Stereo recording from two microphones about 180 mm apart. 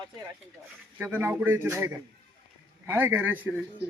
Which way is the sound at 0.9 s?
10° right (ahead or behind).